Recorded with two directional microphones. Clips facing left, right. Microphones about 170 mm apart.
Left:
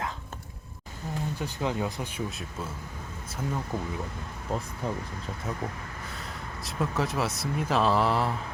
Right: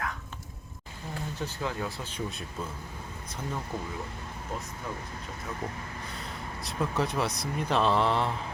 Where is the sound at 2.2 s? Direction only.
5° left (ahead or behind).